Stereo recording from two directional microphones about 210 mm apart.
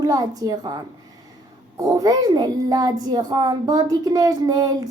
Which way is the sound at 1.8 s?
15° right (ahead or behind).